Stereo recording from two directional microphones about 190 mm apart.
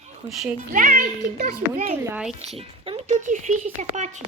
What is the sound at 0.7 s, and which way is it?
Speech, 45° right (ahead or behind).